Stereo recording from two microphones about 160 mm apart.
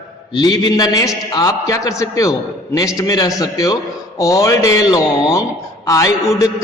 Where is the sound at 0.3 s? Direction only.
25° left (ahead or behind).